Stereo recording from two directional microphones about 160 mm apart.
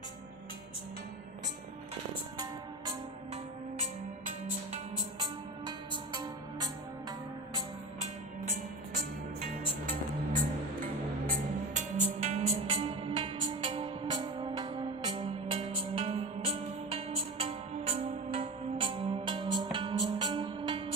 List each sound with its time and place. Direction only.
5.2 s music: 30° right (ahead or behind)
11.3 s music: 50° right (ahead or behind); by 20.8 s 30° right (ahead or behind)